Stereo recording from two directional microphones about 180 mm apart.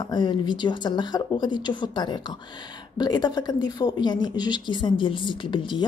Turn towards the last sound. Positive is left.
turn(degrees=25)  # may be behind; listen again after turning